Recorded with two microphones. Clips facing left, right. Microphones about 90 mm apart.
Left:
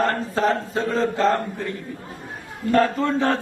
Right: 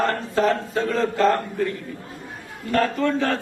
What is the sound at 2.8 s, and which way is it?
Speech, 25° left (ahead or behind).